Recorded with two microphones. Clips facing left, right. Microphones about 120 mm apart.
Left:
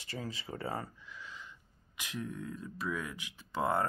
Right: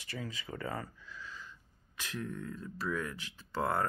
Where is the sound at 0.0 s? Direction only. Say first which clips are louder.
Left 1 dB; 35° left (ahead or behind).